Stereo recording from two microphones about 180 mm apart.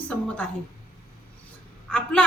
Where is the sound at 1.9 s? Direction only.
10° left (ahead or behind).